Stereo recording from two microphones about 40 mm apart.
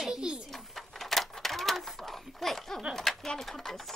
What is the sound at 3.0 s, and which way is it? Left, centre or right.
Bird, centre.